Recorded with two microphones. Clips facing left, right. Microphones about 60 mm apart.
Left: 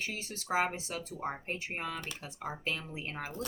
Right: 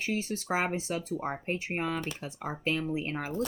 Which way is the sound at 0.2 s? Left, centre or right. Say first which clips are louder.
Right 2 dB; right.